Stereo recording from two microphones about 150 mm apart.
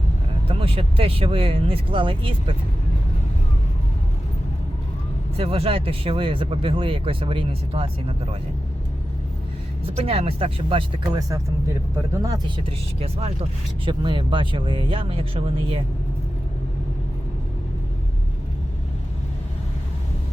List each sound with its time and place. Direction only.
0.4 s speech: 40° right (ahead or behind)
5.4 s speech: 40° right (ahead or behind)
9.8 s speech: 40° right (ahead or behind); by 12.4 s 20° right (ahead or behind)
12.6 s speech: 40° right (ahead or behind)